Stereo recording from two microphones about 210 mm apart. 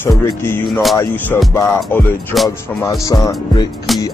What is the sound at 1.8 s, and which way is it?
Music, 5° left (ahead or behind).